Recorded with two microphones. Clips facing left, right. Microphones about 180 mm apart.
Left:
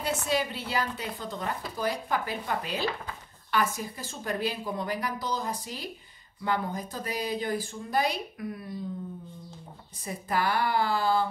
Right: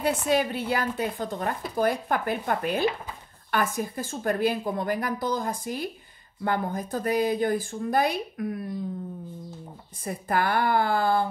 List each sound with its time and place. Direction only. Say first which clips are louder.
0.0 s speech: right 5 dB; 55° right (ahead or behind)
10.0 s speech: right 3 dB; 55° right (ahead or behind)